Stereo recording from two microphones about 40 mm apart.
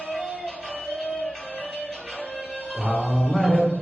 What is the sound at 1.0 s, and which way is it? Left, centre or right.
Music, left.